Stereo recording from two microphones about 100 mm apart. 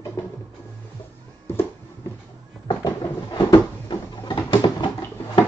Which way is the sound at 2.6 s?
50° left (ahead or behind).